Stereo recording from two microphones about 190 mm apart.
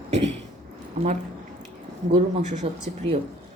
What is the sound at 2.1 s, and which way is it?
Speech, 40° right (ahead or behind).